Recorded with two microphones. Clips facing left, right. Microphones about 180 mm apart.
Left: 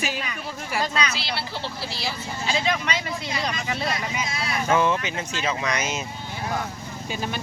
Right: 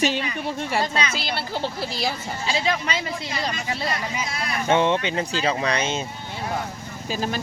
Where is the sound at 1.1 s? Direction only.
45° right (ahead or behind).